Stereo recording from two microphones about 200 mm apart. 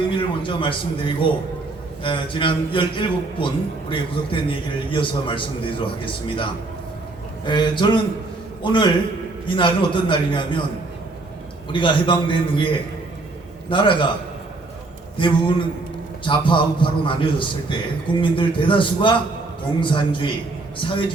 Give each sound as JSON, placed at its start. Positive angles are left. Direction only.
{"t": 0.2, "sound": "a man's voice", "side_deg": 25}
{"t": 11.7, "sound": "a man's voice", "side_deg": 25}
{"t": 13.7, "sound": "a man's voice", "side_deg": 25}
{"t": 15.2, "sound": "a man's voice", "side_deg": 25}